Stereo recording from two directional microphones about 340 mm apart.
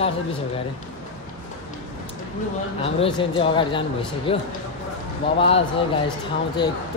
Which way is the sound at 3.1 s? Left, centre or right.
Centre.